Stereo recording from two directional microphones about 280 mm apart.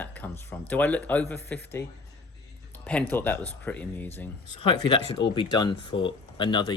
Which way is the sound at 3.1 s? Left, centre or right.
Centre.